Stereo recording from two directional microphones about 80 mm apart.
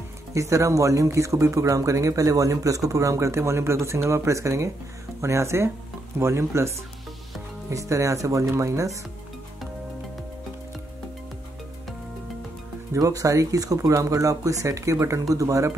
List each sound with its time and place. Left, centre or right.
0.3 s speech: right
7.7 s speech: right
12.9 s speech: right